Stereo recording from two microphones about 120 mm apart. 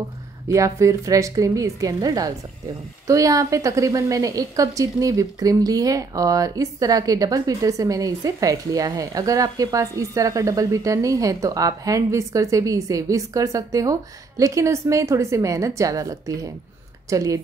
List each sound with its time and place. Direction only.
0.5 s a woman's voice: 25° right (ahead or behind)